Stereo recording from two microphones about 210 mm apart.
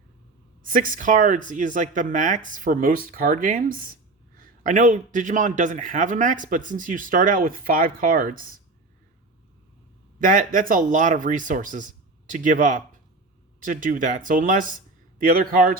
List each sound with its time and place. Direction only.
0.6 s a man's voice: 40° right (ahead or behind)
10.2 s a man's voice: 40° right (ahead or behind)